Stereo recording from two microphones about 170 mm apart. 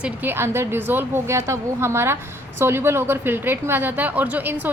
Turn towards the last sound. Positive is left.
turn(degrees=-10)  # may be behind; listen again after turning